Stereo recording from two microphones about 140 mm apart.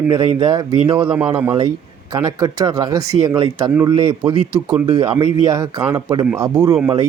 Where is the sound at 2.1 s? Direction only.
30° right (ahead or behind).